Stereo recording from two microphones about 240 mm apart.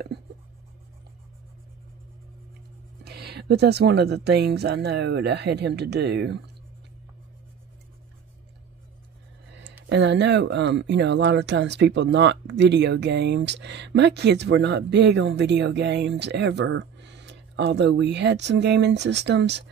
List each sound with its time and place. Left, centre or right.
3.0 s speech: right
9.5 s a sound: right
9.8 s speech: right